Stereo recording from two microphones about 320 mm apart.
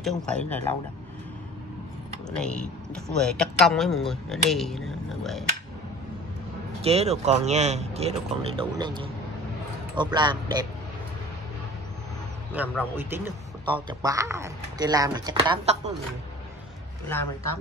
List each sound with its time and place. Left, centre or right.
0.0 s speech: centre
2.2 s speech: centre
6.8 s speech: centre
12.5 s speech: centre